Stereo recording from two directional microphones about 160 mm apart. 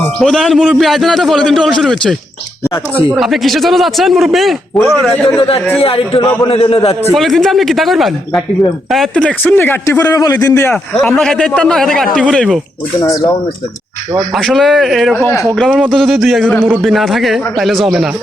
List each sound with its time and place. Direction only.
0.2 s speech: centre (ahead or behind)
5.7 s a man's voice: 35° left (ahead or behind)
7.2 s speech: centre (ahead or behind)
10.1 s a man's voice: 25° left (ahead or behind)
11.0 s speech: 5° left (ahead or behind)
13.0 s a man's voice: 20° left (ahead or behind)
14.3 s speech: centre (ahead or behind)